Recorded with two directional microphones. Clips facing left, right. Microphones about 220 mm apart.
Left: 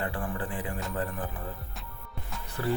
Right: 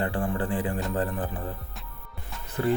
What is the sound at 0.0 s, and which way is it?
Music, 30° right (ahead or behind).